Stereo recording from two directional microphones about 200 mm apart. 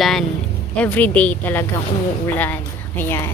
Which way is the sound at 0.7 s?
5° left (ahead or behind).